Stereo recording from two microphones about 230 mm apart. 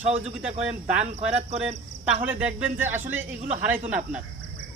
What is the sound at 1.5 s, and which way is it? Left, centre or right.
Speech, centre.